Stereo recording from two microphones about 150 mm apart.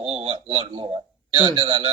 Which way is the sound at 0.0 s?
45° right (ahead or behind).